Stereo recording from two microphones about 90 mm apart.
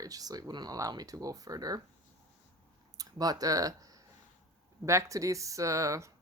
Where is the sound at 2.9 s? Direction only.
45° right (ahead or behind).